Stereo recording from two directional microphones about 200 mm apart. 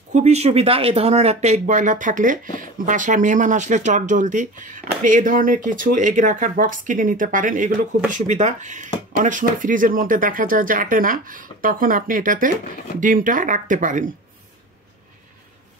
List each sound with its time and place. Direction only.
0.1 s speech: 35° right (ahead or behind)